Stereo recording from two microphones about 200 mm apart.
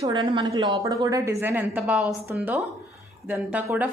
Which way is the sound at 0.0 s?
20° right (ahead or behind).